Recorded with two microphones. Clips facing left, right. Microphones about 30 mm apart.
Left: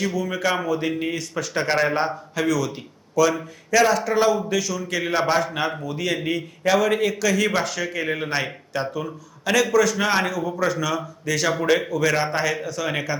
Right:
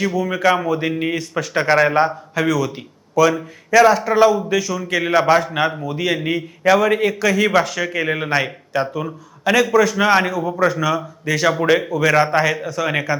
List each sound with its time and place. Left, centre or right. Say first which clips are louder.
0.0 s a man's voice: right 6 dB; centre
8.3 s a man's voice: right 6 dB; centre
9.0 s a man's voice: right 4 dB; right
10.2 s a man's voice: right 5 dB; right